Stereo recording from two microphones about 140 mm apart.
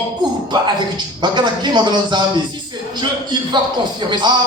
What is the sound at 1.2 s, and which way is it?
A man's voice, 30° right (ahead or behind).